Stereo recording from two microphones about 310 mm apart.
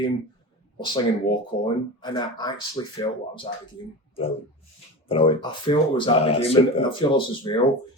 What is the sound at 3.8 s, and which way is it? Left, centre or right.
Speech, left.